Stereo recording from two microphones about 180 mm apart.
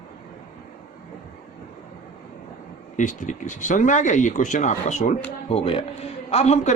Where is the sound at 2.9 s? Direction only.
45° left (ahead or behind).